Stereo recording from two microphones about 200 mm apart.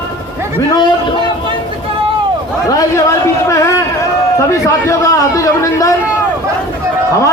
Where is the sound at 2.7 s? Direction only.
15° left (ahead or behind).